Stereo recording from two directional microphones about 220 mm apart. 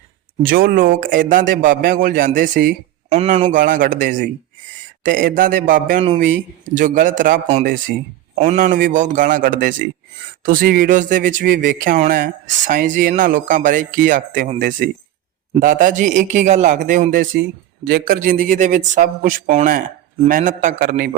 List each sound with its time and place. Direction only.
0.4 s speech: 40° right (ahead or behind)
8.4 s speech: 35° right (ahead or behind)